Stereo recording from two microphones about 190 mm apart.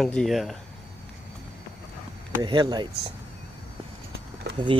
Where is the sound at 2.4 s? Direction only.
25° right (ahead or behind).